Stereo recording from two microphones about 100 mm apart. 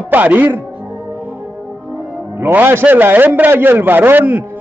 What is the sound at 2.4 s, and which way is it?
A man's voice, 20° right (ahead or behind).